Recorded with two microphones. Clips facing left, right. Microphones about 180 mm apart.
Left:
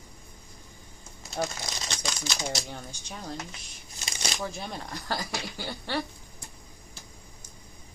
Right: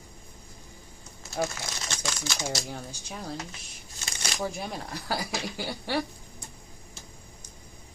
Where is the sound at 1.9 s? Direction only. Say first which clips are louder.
Right 1 dB; 15° left (ahead or behind).